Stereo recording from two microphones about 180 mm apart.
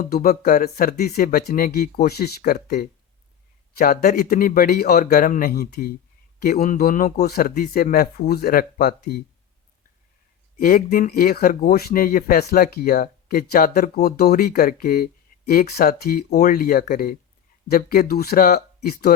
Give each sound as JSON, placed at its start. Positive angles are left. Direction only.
{"t": 0.0, "sound": "speech", "side_deg": 55}
{"t": 10.6, "sound": "speech", "side_deg": 55}